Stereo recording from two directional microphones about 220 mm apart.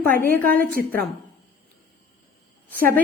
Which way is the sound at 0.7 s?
40° right (ahead or behind).